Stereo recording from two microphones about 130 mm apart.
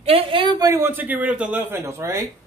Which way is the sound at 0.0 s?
45° right (ahead or behind).